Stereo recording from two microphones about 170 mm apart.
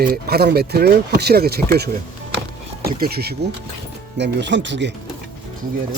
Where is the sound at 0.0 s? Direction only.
65° right (ahead or behind).